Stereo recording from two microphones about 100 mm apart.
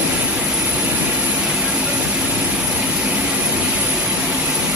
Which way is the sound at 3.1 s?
10° right (ahead or behind).